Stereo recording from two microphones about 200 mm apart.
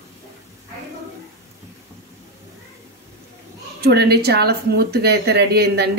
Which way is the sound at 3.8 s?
55° right (ahead or behind).